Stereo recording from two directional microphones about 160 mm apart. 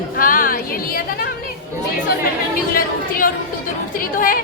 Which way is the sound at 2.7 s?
60° left (ahead or behind).